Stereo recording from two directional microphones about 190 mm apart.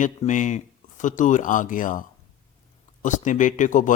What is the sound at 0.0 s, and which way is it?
A man's voice, 40° left (ahead or behind).